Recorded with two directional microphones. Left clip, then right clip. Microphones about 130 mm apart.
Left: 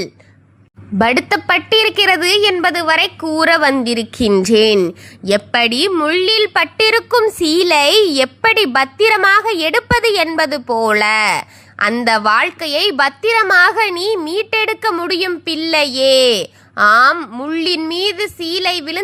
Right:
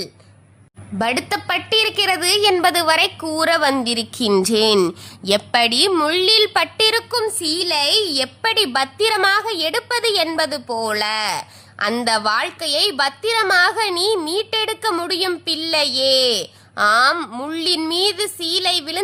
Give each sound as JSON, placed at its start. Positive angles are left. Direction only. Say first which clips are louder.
{"t": 0.9, "sound": "a woman's voice", "louder": "left 7 dB", "side_deg": 35}
{"t": 2.6, "sound": "a woman's voice", "louder": "left 2 dB", "side_deg": 10}
{"t": 7.3, "sound": "a woman's voice", "louder": "left 8 dB", "side_deg": 45}
{"t": 17.2, "sound": "a woman's voice", "louder": "left 1 dB", "side_deg": 0}
{"t": 17.4, "sound": "a woman's voice", "louder": "left 4 dB", "side_deg": 20}